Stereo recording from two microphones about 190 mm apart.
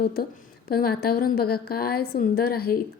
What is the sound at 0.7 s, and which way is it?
A woman's voice, 55° left (ahead or behind).